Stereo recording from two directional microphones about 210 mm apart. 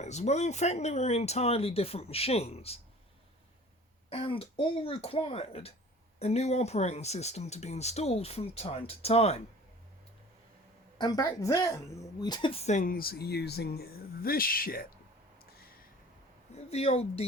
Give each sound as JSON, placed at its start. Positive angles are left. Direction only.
{"t": 0.0, "sound": "speech", "side_deg": 35}
{"t": 4.1, "sound": "speech", "side_deg": 25}
{"t": 10.9, "sound": "speech", "side_deg": 20}
{"t": 16.6, "sound": "speech", "side_deg": 30}